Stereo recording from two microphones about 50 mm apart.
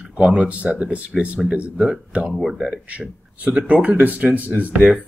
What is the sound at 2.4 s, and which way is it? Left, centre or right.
Speech, centre.